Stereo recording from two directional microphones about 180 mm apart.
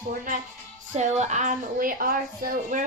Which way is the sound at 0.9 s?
40° right (ahead or behind).